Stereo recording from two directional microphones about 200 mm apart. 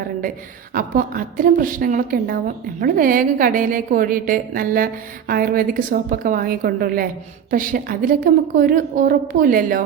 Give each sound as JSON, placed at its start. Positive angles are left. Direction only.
{"t": 0.7, "sound": "a woman's voice", "side_deg": -45}